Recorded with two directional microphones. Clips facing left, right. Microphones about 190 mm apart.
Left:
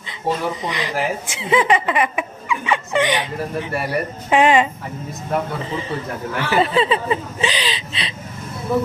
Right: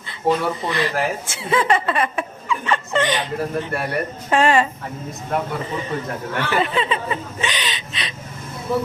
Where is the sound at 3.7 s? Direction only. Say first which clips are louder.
Left 1 dB; 5° left (ahead or behind).